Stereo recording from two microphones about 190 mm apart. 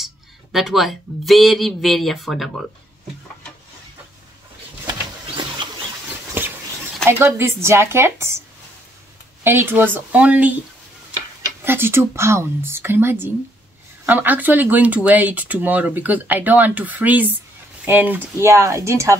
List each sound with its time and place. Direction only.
0.0 s speech: centre (ahead or behind)
6.4 s a sound: 10° right (ahead or behind)
7.1 s speech: 15° right (ahead or behind)
9.4 s speech: 10° right (ahead or behind)
11.6 s speech: 10° right (ahead or behind)